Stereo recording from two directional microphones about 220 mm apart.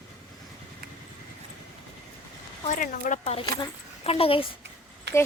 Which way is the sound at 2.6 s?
35° left (ahead or behind).